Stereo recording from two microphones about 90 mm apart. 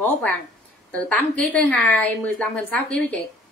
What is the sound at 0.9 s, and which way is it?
A woman's voice, 15° left (ahead or behind).